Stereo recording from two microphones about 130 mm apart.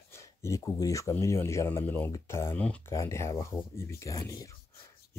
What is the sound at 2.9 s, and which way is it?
Speech, 20° left (ahead or behind).